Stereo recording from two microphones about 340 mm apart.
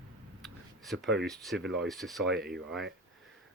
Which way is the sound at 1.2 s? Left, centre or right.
Centre.